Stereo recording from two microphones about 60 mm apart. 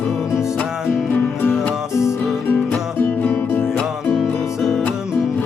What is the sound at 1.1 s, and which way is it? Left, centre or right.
Music, left.